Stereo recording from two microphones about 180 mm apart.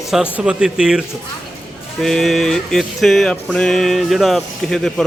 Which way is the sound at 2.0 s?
Centre (ahead or behind).